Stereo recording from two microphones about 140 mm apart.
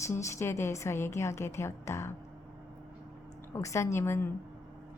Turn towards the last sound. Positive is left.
turn(degrees=20)  # may be behind; listen again after turning